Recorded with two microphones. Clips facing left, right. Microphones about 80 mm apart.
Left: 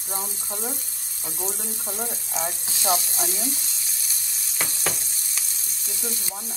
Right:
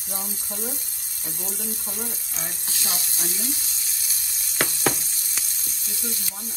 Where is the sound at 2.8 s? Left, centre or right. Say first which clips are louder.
Left 11 dB; left.